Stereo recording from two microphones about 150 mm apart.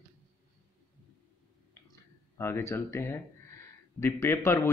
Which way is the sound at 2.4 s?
15° left (ahead or behind).